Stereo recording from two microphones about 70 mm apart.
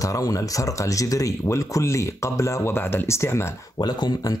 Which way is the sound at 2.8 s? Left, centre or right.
Left.